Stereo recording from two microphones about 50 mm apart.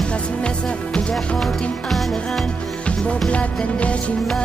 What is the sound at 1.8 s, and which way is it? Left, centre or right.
Music, centre.